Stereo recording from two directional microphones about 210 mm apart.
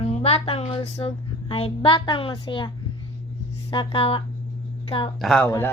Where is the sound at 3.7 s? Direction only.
20° left (ahead or behind).